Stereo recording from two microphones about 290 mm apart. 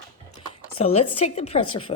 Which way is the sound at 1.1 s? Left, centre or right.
Left.